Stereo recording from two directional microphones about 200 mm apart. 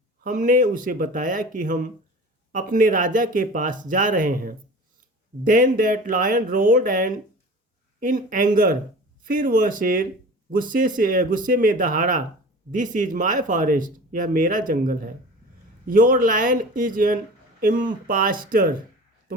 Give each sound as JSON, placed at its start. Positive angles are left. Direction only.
{"t": 0.3, "sound": "speech", "side_deg": -40}